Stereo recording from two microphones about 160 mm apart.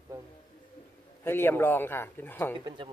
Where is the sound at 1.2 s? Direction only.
15° left (ahead or behind).